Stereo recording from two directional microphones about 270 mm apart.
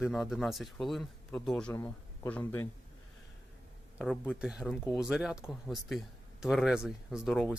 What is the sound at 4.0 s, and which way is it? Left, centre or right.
Speech, centre.